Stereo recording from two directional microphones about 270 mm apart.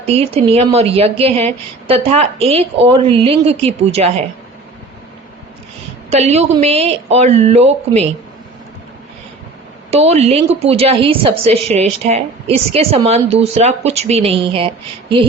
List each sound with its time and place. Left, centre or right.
0.0 s a woman's voice: right
6.1 s a woman's voice: right
9.9 s a woman's voice: right